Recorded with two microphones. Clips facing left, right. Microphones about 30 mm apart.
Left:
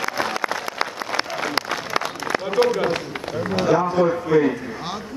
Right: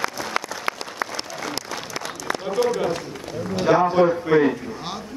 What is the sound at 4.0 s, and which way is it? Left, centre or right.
Speech, right.